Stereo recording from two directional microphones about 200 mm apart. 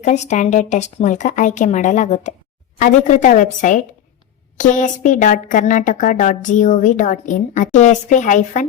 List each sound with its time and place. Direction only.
0.0 s a woman's voice: 35° left (ahead or behind)